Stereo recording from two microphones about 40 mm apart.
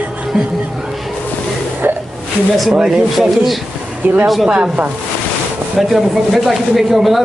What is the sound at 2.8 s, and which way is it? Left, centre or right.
Speech, centre.